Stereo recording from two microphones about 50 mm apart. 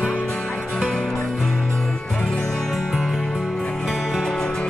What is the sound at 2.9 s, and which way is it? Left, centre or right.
Music, centre.